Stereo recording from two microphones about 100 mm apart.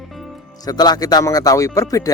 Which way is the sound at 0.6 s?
40° left (ahead or behind).